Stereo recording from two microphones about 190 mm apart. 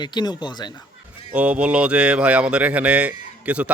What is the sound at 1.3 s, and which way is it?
A man's voice, 5° right (ahead or behind).